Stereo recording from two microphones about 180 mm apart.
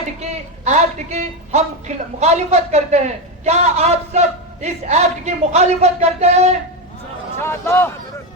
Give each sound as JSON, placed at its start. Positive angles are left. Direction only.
{"t": 0.2, "sound": "a man's voice", "side_deg": -40}
{"t": 7.4, "sound": "speech", "side_deg": 15}